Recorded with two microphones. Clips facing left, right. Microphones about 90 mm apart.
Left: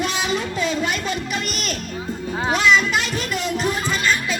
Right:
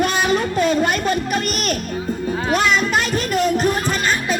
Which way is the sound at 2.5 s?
45° right (ahead or behind).